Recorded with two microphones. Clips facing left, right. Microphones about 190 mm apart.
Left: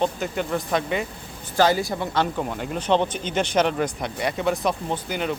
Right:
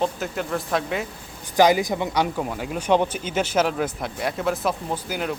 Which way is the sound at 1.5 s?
15° right (ahead or behind).